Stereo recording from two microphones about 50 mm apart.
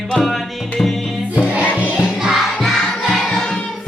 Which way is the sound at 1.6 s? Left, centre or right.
Left.